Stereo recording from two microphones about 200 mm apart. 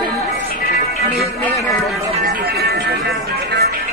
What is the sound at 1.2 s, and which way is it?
Music, 15° left (ahead or behind).